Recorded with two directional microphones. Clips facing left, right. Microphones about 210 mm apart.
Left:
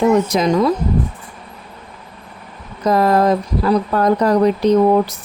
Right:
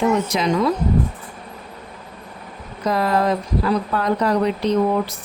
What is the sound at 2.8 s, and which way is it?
Speech, 45° left (ahead or behind).